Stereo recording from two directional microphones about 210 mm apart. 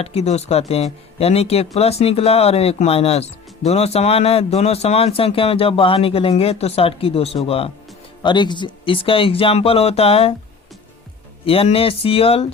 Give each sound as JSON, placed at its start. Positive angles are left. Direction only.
{"t": 0.0, "sound": "speech", "side_deg": 30}
{"t": 11.4, "sound": "speech", "side_deg": 25}